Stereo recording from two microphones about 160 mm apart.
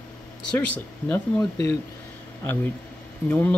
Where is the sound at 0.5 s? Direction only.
10° left (ahead or behind).